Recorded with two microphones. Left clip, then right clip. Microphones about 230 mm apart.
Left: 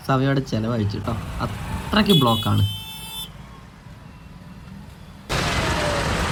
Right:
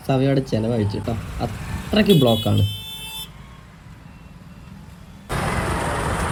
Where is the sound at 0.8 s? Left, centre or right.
Left.